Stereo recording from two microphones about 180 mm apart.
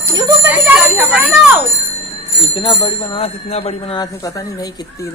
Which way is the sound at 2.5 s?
25° left (ahead or behind).